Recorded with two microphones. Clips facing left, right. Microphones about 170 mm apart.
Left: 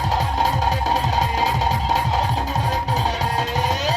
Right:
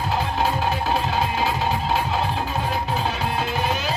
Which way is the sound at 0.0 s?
40° left (ahead or behind).